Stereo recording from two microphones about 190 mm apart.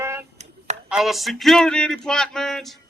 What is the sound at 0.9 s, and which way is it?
A man's voice, centre (ahead or behind).